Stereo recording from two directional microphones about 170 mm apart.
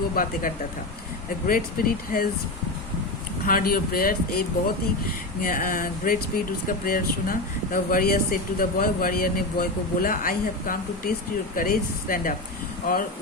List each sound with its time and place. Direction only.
0.2 s speech: 60° left (ahead or behind)
1.5 s speech: 60° left (ahead or behind)
3.4 s speech: 60° left (ahead or behind)